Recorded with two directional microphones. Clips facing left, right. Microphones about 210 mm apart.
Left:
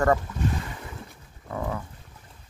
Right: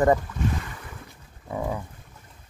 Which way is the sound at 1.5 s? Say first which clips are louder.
Right 2 dB; 15° right (ahead or behind).